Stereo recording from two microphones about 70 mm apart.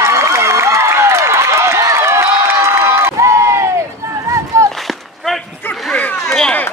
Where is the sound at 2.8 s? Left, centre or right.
Right.